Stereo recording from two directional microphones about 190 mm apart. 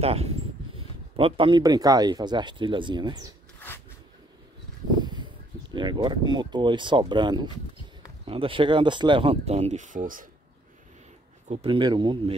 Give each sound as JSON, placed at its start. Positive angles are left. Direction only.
{"t": 0.0, "sound": "speech", "side_deg": -30}
{"t": 4.9, "sound": "a sound", "side_deg": -20}
{"t": 5.8, "sound": "speech", "side_deg": -25}
{"t": 11.4, "sound": "speech", "side_deg": -35}